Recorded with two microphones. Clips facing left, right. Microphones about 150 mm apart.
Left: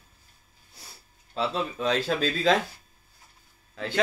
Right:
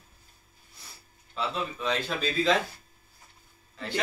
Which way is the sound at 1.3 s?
35° left (ahead or behind).